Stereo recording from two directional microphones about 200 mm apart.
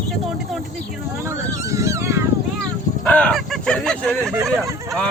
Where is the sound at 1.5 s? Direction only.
15° right (ahead or behind).